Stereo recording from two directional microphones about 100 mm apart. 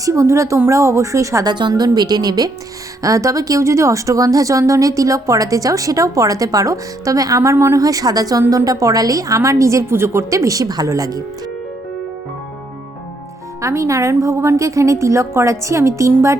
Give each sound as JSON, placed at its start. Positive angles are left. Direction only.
{"t": 0.0, "sound": "speech", "side_deg": -30}
{"t": 1.5, "sound": "a woman's voice", "side_deg": -45}
{"t": 13.6, "sound": "speech", "side_deg": -30}